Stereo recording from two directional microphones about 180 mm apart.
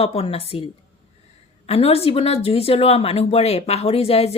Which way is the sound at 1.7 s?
35° left (ahead or behind).